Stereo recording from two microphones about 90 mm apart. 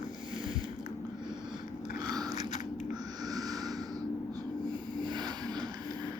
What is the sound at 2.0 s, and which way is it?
Biting, 45° right (ahead or behind).